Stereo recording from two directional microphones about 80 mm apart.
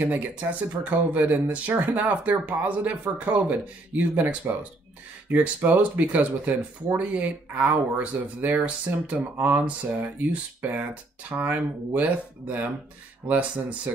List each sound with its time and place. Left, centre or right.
0.0 s speech: right